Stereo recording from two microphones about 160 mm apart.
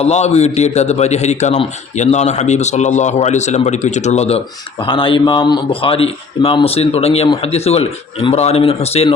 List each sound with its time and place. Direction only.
0.0 s a man's voice: 45° left (ahead or behind)